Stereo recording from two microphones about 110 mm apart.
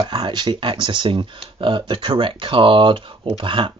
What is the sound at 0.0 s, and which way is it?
Speech, 40° right (ahead or behind).